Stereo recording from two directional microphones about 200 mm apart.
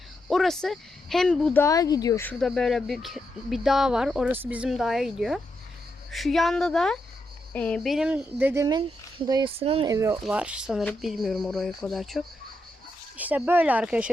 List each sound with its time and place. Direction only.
0.3 s speech: centre (ahead or behind); by 9.9 s 30° right (ahead or behind)
9.9 s speech: 15° right (ahead or behind)